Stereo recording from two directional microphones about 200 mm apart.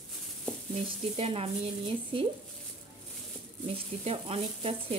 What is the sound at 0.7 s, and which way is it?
Speech, 30° right (ahead or behind).